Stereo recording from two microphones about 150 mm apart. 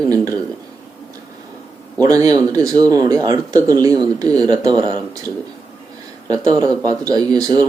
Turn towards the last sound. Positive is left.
turn(degrees=-25)  # may be behind; listen again after turning